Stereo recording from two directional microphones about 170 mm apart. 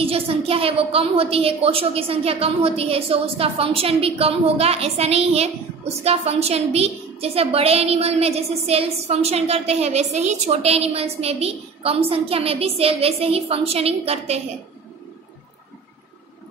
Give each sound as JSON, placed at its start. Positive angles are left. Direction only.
{"t": 0.0, "sound": "a woman's voice", "side_deg": -35}